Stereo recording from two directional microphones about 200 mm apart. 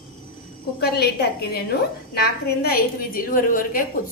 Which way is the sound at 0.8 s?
55° left (ahead or behind).